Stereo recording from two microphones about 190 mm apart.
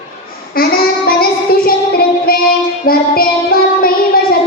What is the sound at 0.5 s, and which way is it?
Child singing, 50° left (ahead or behind).